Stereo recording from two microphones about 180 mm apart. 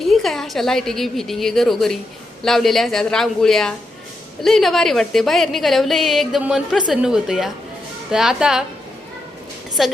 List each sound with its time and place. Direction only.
0.0 s a woman's voice: centre (ahead or behind)
9.8 s a woman's voice: centre (ahead or behind)